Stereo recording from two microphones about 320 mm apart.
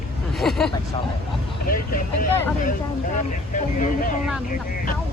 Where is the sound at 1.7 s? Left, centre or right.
Left.